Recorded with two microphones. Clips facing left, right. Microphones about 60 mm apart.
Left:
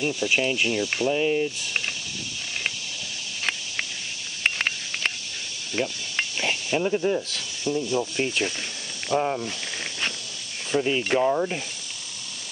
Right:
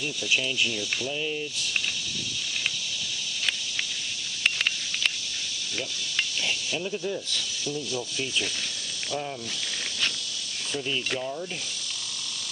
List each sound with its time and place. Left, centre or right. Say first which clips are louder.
0.0 s speech: left 5 dB; left
4.4 s a sound: left 2 dB; left
5.8 s cricket: left 5 dB; left
7.3 s speech: left 5 dB; left
10.7 s speech: left 8 dB; left
11.2 s speech: left 10 dB; left